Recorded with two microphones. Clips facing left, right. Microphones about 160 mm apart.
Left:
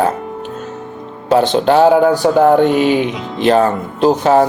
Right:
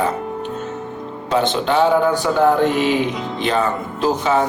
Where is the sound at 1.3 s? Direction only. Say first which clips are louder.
Left 6 dB; 40° left (ahead or behind).